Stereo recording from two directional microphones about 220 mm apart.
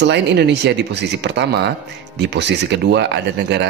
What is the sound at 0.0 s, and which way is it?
Speech, 50° right (ahead or behind).